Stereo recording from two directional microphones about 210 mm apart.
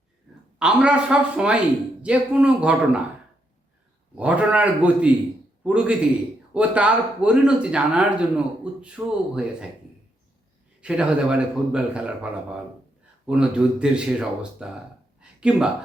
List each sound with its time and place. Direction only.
0.6 s speech: 5° right (ahead or behind)
4.1 s a man's voice: 5° right (ahead or behind)
10.8 s speech: 5° right (ahead or behind)
15.2 s a sound: 5° right (ahead or behind)